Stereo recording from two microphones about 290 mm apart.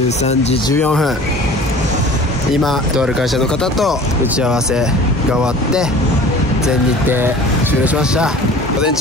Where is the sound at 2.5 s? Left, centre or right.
Centre.